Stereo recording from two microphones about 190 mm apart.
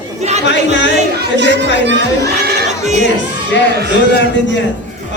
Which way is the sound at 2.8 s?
35° right (ahead or behind).